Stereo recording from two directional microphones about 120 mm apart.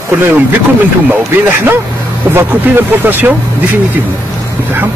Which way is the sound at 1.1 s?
15° right (ahead or behind).